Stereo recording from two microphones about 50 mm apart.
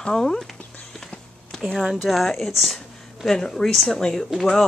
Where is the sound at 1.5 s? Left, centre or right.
Centre.